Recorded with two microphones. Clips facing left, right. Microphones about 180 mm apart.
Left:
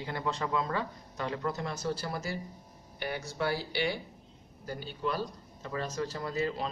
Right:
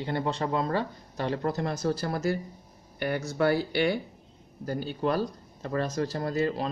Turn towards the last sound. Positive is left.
turn(degrees=-40)  # may be behind; listen again after turning